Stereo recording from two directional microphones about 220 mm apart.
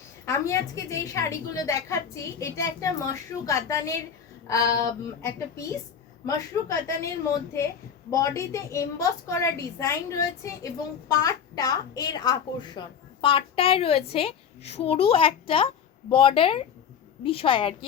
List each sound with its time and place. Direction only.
0.3 s a woman's voice: 15° left (ahead or behind)
8.1 s a woman's voice: 15° left (ahead or behind)